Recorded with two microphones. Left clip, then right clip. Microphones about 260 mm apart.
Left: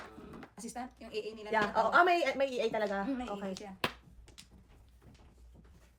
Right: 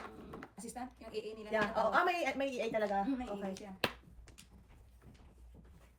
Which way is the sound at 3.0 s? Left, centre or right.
Left.